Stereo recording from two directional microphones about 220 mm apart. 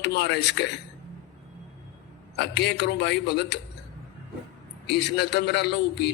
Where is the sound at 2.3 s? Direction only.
50° left (ahead or behind).